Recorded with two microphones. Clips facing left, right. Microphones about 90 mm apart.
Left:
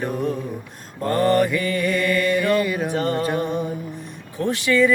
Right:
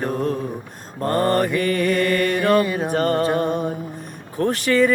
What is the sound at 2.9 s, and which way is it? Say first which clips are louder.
Mantra: right 3 dB; 50° right (ahead or behind).